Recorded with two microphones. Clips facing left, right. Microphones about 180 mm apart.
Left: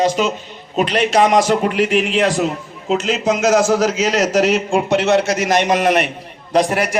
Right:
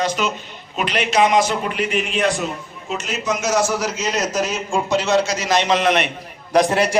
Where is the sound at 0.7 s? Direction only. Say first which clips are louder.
Left 4 dB; 35° left (ahead or behind).